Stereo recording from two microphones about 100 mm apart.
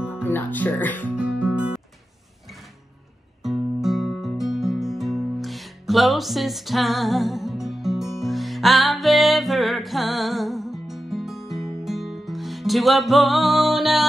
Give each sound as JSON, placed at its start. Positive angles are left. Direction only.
{"t": 0.2, "sound": "speech", "side_deg": 20}
{"t": 1.1, "sound": "music", "side_deg": -15}
{"t": 3.4, "sound": "music", "side_deg": -5}